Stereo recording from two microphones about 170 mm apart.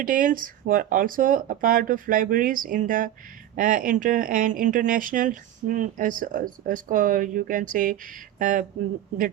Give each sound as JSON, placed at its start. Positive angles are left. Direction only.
{"t": 0.0, "sound": "speech", "side_deg": -50}